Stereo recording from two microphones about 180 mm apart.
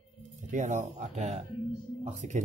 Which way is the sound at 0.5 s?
45° right (ahead or behind).